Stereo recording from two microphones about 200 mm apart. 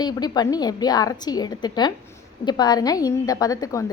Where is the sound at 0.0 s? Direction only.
20° left (ahead or behind).